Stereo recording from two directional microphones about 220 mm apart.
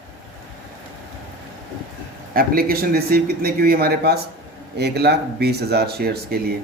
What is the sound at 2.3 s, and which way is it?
A man's voice, 45° right (ahead or behind).